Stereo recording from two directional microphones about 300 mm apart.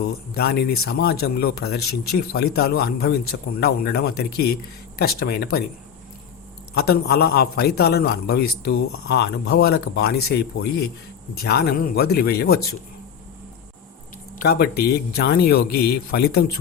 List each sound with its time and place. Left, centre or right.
0.3 s a man's voice: left
6.7 s a man's voice: left
14.4 s a man's voice: left